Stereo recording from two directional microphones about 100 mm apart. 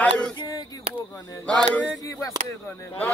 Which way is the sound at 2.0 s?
35° left (ahead or behind).